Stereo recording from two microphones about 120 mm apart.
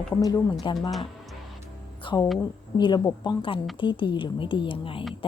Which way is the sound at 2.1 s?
40° left (ahead or behind).